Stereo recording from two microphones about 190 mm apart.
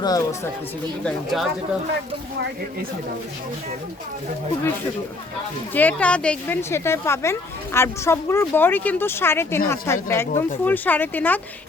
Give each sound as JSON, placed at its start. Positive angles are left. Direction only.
{"t": 0.0, "sound": "speech", "side_deg": 20}
{"t": 1.0, "sound": "speech", "side_deg": 0}
{"t": 5.7, "sound": "speech", "side_deg": 10}